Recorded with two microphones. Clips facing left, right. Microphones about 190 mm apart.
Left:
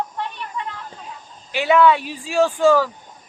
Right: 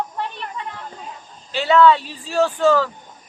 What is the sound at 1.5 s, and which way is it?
Speech, 15° left (ahead or behind).